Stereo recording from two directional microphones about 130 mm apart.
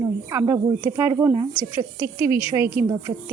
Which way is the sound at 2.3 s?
40° left (ahead or behind).